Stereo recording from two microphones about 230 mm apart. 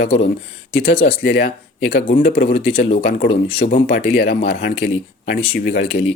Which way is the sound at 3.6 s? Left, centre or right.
Left.